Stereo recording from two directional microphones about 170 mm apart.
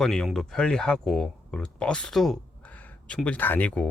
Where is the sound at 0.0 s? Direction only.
Centre (ahead or behind).